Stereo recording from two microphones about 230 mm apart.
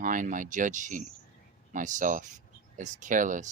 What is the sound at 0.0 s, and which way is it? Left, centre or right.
Speech, right.